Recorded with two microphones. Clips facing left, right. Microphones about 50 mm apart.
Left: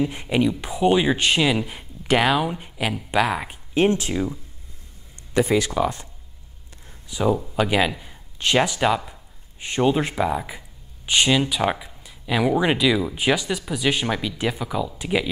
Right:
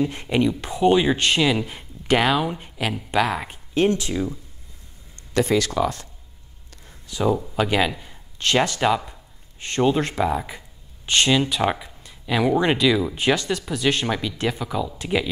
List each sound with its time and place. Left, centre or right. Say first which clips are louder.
0.0 s speech: even; centre
3.7 s speech: left 1 dB; left
7.1 s speech: even; centre